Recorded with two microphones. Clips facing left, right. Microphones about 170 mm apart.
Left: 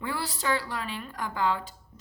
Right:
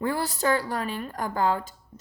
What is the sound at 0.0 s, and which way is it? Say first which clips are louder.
A woman's voice: right 6 dB; 45° right (ahead or behind).